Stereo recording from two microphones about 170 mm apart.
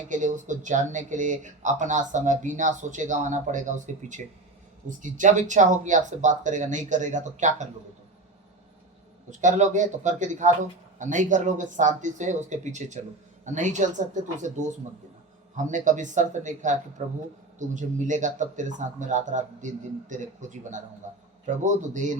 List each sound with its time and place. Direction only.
0.1 s speech: 45° right (ahead or behind)
9.4 s speech: 45° right (ahead or behind)